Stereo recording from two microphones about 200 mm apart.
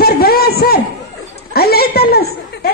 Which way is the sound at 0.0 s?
50° left (ahead or behind).